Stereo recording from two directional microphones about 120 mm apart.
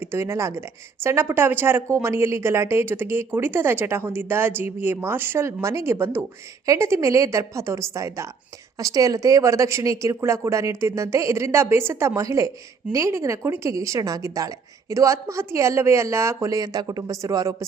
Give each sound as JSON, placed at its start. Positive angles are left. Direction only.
{"t": 0.0, "sound": "a woman's voice", "side_deg": -20}